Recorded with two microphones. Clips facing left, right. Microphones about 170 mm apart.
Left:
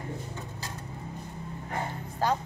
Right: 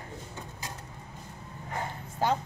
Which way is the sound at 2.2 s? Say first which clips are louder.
Even; 20° right (ahead or behind).